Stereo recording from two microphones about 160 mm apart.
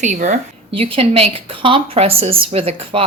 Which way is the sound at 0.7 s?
35° right (ahead or behind).